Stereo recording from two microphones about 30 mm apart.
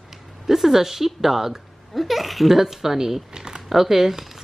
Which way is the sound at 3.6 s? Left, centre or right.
Centre.